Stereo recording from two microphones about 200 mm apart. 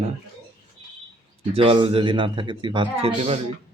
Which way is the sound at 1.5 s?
25° right (ahead or behind).